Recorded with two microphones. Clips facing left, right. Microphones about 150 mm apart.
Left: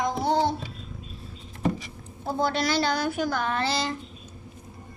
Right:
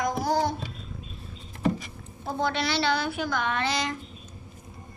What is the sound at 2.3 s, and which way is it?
A woman's voice, 40° left (ahead or behind).